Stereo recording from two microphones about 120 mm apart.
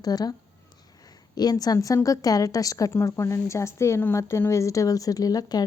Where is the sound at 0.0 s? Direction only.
35° left (ahead or behind).